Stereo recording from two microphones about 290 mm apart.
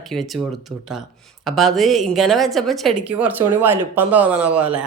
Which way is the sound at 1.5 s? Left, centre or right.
Centre.